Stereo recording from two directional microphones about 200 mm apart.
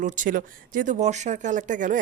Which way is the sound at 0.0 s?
40° right (ahead or behind).